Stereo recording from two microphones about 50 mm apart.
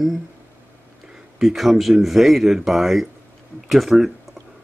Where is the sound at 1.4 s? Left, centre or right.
Centre.